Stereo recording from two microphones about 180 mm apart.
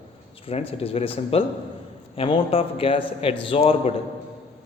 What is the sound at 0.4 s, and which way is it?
A man's voice, 35° left (ahead or behind).